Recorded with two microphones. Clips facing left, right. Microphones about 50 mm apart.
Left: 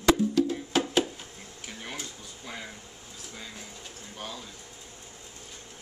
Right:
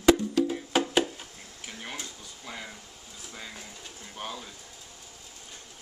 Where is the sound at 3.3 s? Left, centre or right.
Centre.